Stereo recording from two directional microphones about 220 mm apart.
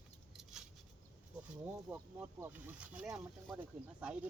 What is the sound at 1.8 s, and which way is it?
Speech, 10° right (ahead or behind).